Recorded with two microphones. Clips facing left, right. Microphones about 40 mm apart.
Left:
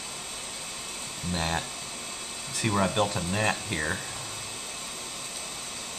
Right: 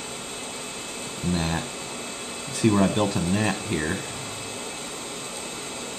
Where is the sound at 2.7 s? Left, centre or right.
Centre.